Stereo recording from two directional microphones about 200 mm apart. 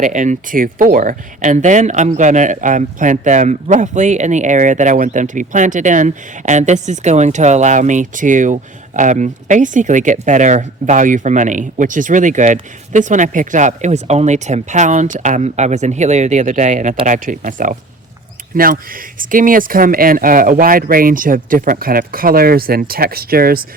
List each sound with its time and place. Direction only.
0.0 s speech: 40° right (ahead or behind)